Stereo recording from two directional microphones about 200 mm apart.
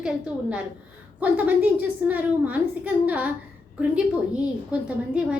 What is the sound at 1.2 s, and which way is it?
A woman's voice, 5° right (ahead or behind).